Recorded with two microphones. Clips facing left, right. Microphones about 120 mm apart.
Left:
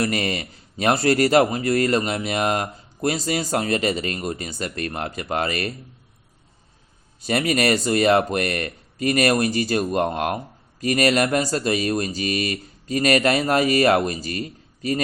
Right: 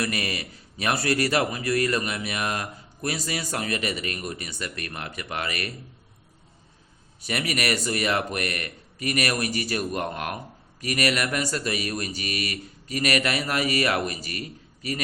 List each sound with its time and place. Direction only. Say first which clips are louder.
0.0 s speech: left 5 dB; 30° left (ahead or behind)
7.3 s speech: left 7 dB; 30° left (ahead or behind)